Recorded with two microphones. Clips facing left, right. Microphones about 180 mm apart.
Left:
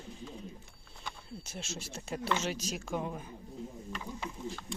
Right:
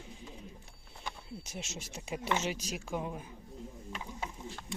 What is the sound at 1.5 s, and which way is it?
Speech, 20° right (ahead or behind).